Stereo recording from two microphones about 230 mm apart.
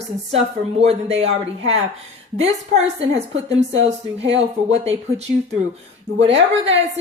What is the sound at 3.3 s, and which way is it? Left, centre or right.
Speech, right.